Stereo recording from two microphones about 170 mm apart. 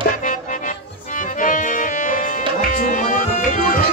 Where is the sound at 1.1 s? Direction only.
50° left (ahead or behind).